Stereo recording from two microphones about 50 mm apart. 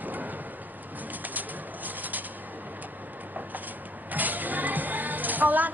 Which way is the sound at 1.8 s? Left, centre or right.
Right.